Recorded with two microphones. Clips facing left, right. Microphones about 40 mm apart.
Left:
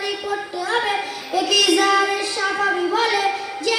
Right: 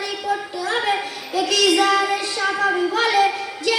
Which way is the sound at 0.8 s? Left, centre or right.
Centre.